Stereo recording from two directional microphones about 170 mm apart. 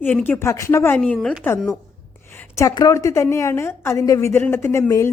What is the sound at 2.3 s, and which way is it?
Speech, 15° left (ahead or behind).